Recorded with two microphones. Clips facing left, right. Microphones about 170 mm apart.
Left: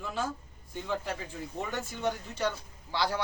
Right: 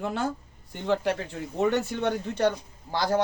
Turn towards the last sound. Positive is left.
turn(degrees=-45)  # may be behind; listen again after turning